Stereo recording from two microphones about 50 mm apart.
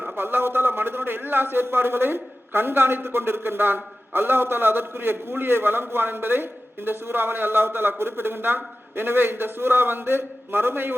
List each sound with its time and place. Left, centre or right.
0.2 s a man's voice: right